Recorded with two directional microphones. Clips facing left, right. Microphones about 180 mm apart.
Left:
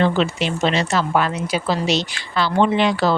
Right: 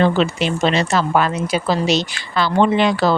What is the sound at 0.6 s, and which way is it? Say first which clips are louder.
A woman's voice: right 2 dB; 45° right (ahead or behind).